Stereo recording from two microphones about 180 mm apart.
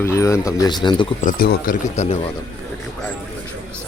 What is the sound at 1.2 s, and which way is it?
Speech, 55° left (ahead or behind).